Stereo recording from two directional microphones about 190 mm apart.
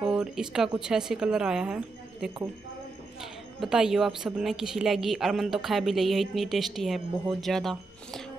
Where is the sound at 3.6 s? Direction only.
5° right (ahead or behind).